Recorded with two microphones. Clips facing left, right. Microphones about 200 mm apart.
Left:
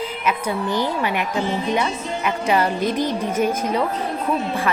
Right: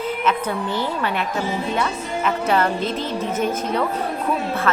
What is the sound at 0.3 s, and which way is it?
A woman's voice, 15° left (ahead or behind).